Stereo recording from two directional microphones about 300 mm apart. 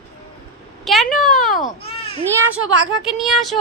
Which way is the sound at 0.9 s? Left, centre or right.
Centre.